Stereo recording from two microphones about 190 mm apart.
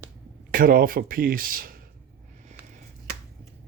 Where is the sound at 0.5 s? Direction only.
50° right (ahead or behind).